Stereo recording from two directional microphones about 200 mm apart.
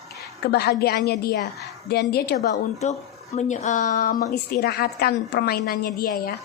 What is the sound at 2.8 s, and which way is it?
Speech, 35° left (ahead or behind).